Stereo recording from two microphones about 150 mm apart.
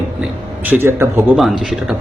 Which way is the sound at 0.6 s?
15° right (ahead or behind).